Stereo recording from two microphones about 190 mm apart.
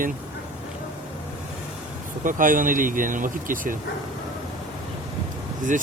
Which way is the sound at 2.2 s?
45° right (ahead or behind).